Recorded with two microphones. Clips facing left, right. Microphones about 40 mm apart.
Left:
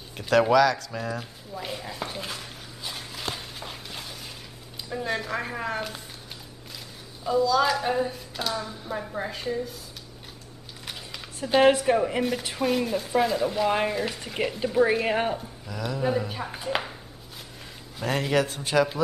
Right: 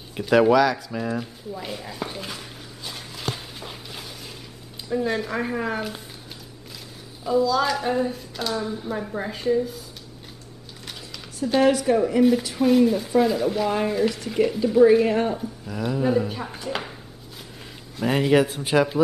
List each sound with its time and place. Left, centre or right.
0.3 s speech: centre
1.2 s a sound: centre
4.8 s speech: centre
7.2 s speech: centre
11.6 s speech: left
12.2 s speech: centre
13.7 s a woman's voice: centre
15.0 s speech: left
15.7 s speech: centre
16.0 s speech: centre
16.5 s a woman's voice: centre
18.0 s speech: centre